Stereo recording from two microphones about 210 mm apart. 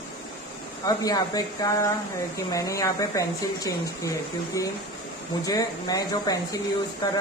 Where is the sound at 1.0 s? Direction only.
15° left (ahead or behind).